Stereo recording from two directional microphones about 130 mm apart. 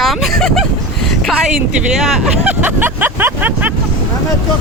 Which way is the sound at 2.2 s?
10° right (ahead or behind).